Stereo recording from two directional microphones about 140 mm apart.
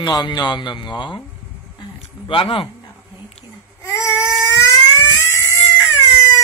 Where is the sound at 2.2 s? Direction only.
40° left (ahead or behind).